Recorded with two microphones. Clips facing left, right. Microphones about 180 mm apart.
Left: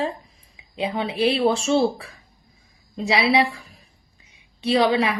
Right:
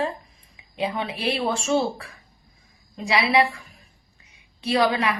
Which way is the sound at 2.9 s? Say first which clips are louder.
Left 3 dB; 30° left (ahead or behind).